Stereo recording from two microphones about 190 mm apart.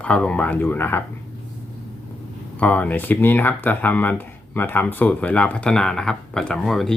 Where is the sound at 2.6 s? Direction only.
10° left (ahead or behind).